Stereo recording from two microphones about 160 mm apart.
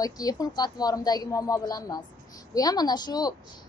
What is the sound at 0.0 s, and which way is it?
A woman's voice, 25° left (ahead or behind).